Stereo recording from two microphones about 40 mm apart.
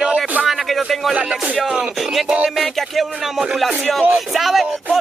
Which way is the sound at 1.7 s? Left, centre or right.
Centre.